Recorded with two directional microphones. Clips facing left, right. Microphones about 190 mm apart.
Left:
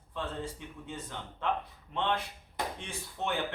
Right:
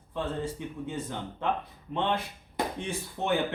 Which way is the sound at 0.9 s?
10° right (ahead or behind).